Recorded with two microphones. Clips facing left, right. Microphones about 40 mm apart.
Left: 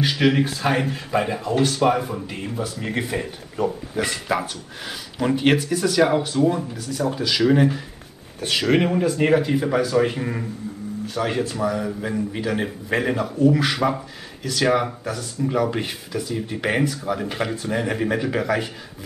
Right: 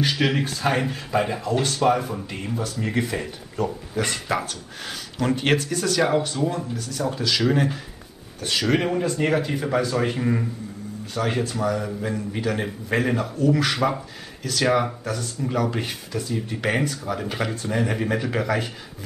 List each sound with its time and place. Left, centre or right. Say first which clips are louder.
0.0 s speech: left 3 dB; centre
4.0 s speech: left 2 dB; centre
8.4 s speech: left 3 dB; left; by 18.7 s centre